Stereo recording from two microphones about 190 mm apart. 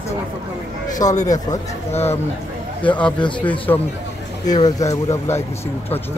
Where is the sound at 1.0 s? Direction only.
40° left (ahead or behind).